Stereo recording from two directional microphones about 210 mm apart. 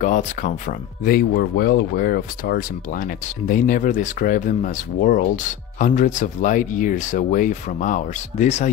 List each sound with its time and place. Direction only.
0.0 s speech: 35° left (ahead or behind)